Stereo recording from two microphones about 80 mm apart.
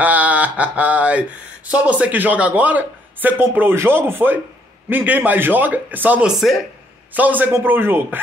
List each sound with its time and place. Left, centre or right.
0.0 s a sound: centre
1.7 s speech: centre
6.2 s speech: centre
7.2 s speech: right